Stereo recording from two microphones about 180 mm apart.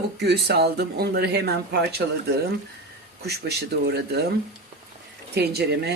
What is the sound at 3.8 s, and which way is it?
Speech, 65° right (ahead or behind).